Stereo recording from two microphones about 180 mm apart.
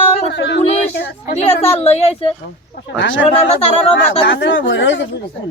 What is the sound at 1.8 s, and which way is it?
Speech, 35° left (ahead or behind).